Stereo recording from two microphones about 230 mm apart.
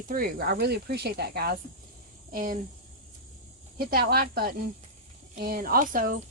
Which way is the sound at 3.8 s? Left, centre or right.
Right.